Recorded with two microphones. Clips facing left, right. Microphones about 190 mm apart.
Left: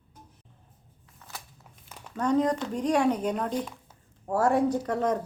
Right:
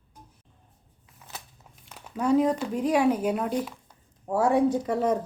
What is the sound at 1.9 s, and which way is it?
Speech, 5° right (ahead or behind).